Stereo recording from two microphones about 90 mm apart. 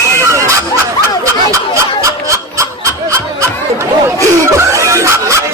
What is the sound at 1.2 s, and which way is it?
Snicker, 35° right (ahead or behind).